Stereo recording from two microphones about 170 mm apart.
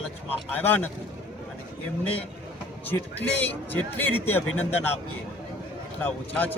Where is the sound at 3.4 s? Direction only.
10° left (ahead or behind).